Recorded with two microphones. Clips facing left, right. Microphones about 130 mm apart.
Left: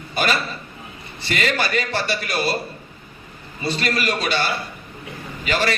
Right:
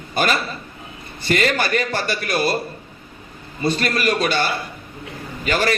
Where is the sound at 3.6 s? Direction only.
50° right (ahead or behind).